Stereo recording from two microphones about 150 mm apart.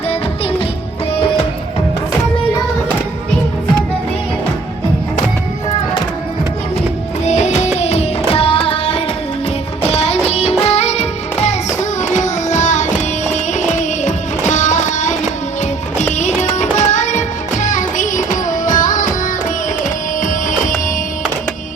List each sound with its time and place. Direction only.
7.3 s music: 50° left (ahead or behind)
11.4 s child singing: 50° left (ahead or behind)
13.3 s music: 50° left (ahead or behind)
16.1 s music: 50° left (ahead or behind)
20.2 s music: 60° left (ahead or behind)